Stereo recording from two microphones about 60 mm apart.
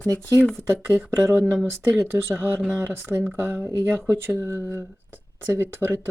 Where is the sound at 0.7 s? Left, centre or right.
Right.